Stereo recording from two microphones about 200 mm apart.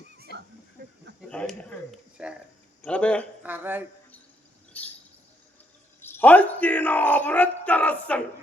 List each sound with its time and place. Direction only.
0.3 s a sound: 50° left (ahead or behind)
1.3 s a man's voice: 5° left (ahead or behind)
2.8 s a man's voice: 5° left (ahead or behind)
3.4 s speech: 10° right (ahead or behind)
4.7 s a sound: 10° left (ahead or behind)
6.0 s speech: 10° left (ahead or behind)